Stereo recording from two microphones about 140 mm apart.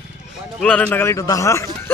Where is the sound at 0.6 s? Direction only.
10° left (ahead or behind).